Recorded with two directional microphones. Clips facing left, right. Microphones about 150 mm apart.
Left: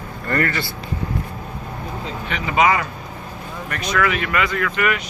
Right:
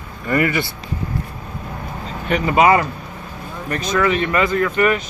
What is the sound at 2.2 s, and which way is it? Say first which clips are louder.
Speech: right 4 dB; 40° right (ahead or behind).